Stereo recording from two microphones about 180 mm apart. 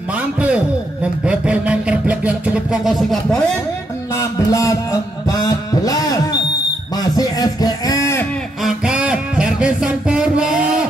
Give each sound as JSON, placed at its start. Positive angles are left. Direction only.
{"t": 1.2, "sound": "music", "side_deg": -5}
{"t": 4.5, "sound": "music", "side_deg": 15}
{"t": 5.3, "sound": "a sound", "side_deg": 20}
{"t": 8.6, "sound": "music", "side_deg": -5}